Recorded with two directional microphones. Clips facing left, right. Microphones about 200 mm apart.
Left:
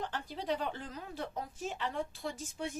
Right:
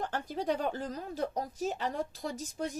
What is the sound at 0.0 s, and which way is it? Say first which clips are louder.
Speech: right 5 dB; 45° right (ahead or behind).